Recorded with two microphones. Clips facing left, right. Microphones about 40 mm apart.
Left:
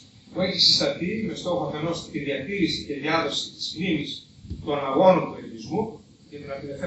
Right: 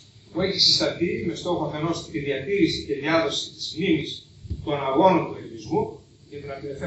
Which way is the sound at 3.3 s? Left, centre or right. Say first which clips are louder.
Right 2 dB; centre.